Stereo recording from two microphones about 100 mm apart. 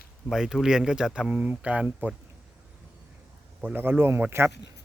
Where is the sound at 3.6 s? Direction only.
20° right (ahead or behind).